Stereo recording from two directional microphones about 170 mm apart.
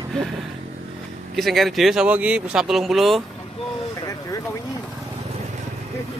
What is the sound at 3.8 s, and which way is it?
Vehicle, 20° left (ahead or behind).